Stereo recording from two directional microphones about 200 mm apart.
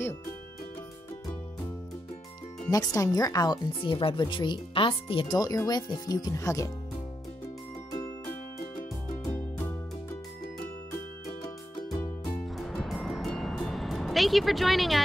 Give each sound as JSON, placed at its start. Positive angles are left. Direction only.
{"t": 2.7, "sound": "speech", "side_deg": 15}
{"t": 12.5, "sound": "music", "side_deg": 0}